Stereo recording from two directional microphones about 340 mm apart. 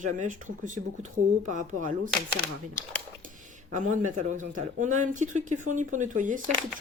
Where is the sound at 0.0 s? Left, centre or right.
Right.